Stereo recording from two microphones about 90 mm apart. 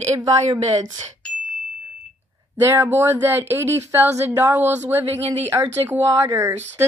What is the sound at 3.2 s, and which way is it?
Speech, 25° right (ahead or behind).